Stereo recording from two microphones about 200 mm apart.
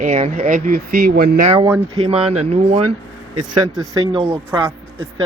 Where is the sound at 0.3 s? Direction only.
45° right (ahead or behind).